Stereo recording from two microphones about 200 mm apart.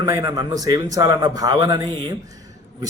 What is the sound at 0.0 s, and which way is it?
A man's voice, 15° right (ahead or behind).